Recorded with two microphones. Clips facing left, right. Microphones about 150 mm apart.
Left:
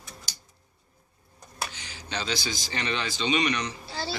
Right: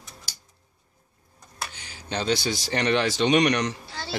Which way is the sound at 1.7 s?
55° right (ahead or behind).